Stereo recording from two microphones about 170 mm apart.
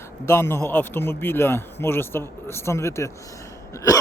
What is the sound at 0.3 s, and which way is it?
Speech, 15° left (ahead or behind).